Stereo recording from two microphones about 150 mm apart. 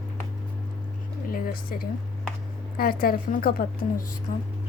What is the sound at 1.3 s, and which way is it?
A woman's voice, 80° left.